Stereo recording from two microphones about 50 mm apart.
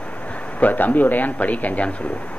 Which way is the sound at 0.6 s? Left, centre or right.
Left.